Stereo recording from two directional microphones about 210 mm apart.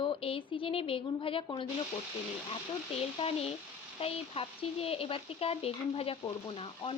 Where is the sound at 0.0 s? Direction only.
25° left (ahead or behind).